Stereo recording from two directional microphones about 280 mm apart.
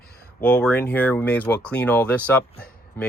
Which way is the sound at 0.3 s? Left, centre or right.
Centre.